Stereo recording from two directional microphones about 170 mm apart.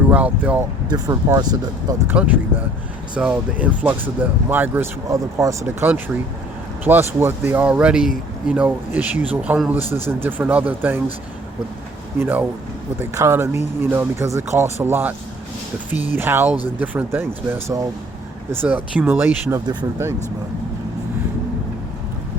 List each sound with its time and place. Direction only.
0.1 s speech: 10° right (ahead or behind)
0.9 s speech: 20° right (ahead or behind)
2.1 s speech: 10° right (ahead or behind)
12.2 s speech: 10° right (ahead or behind)
16.1 s speech: 10° right (ahead or behind)